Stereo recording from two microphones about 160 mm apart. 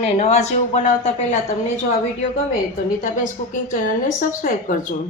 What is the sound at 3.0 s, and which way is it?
A woman's voice, 55° left (ahead or behind).